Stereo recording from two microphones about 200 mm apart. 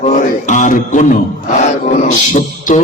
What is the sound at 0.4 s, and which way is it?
Mantra, 40° left (ahead or behind).